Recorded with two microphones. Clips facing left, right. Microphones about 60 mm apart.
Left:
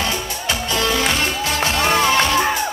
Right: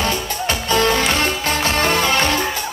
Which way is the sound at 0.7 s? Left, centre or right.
Right.